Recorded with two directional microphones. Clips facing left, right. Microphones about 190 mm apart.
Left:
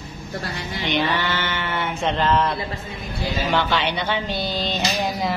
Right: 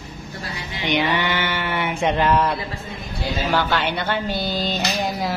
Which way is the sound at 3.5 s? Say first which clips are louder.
Right 1 dB; 5° right (ahead or behind).